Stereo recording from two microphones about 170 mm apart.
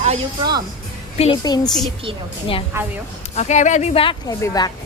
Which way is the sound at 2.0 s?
30° right (ahead or behind).